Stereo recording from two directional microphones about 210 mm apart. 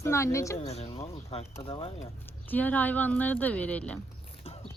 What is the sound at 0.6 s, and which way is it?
Speech, 30° left (ahead or behind).